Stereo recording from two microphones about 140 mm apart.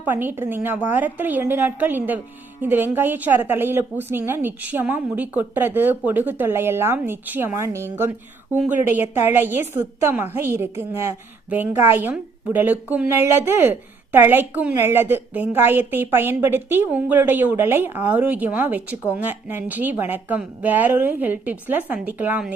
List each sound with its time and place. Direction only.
0.0 s a woman's voice: 15° right (ahead or behind)